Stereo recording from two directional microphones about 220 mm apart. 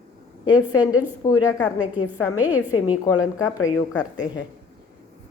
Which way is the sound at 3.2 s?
65° left (ahead or behind).